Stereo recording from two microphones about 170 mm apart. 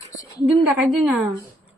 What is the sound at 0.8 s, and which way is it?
Speech, 5° right (ahead or behind).